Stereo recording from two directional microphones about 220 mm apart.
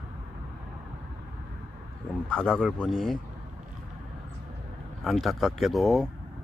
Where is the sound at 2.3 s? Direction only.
5° left (ahead or behind).